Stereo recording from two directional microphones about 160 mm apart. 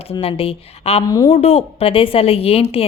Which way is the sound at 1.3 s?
40° left (ahead or behind).